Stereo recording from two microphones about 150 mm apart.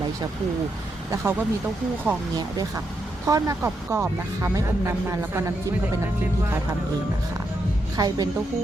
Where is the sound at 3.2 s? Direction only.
20° right (ahead or behind).